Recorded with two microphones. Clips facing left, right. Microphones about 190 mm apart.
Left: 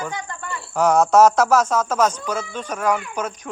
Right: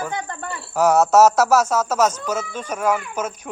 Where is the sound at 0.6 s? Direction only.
5° right (ahead or behind).